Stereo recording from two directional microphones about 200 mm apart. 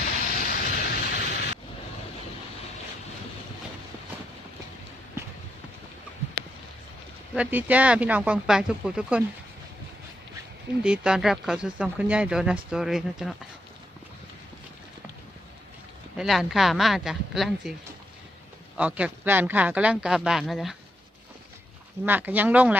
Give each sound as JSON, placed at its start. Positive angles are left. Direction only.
{"t": 0.3, "sound": "a sound", "side_deg": 45}
{"t": 7.3, "sound": "speech", "side_deg": -5}
{"t": 10.8, "sound": "speech", "side_deg": -5}
{"t": 16.1, "sound": "speech", "side_deg": 0}
{"t": 18.8, "sound": "speech", "side_deg": -5}
{"t": 22.0, "sound": "speech", "side_deg": -10}